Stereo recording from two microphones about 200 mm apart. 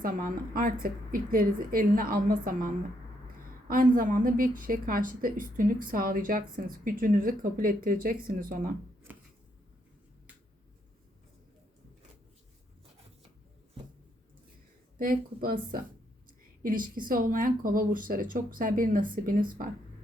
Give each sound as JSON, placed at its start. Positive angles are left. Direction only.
{"t": 0.0, "sound": "a woman's voice", "side_deg": -45}
{"t": 3.7, "sound": "a woman's voice", "side_deg": -45}
{"t": 14.9, "sound": "a woman's voice", "side_deg": -45}